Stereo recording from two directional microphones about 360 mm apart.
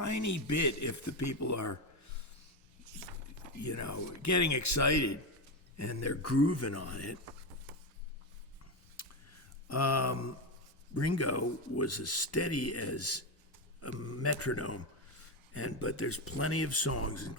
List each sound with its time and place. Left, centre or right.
0.0 s speech: left
3.6 s speech: left
9.0 s a sound: left
10.9 s speech: left